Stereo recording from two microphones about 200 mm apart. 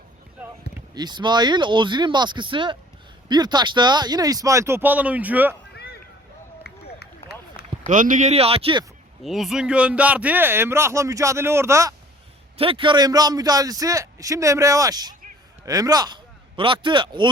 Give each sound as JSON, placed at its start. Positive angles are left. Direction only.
{"t": 0.9, "sound": "a man's voice", "side_deg": -20}
{"t": 5.7, "sound": "a sound", "side_deg": 55}
{"t": 6.6, "sound": "run", "side_deg": 55}
{"t": 7.9, "sound": "a man's voice", "side_deg": -40}
{"t": 9.2, "sound": "speech", "side_deg": 0}
{"t": 12.5, "sound": "a man's voice", "side_deg": -25}